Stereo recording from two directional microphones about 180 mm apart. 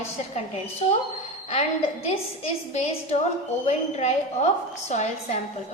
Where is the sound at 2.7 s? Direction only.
40° left (ahead or behind).